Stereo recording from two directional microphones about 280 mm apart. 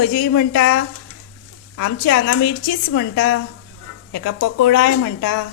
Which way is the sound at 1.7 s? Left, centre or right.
Left.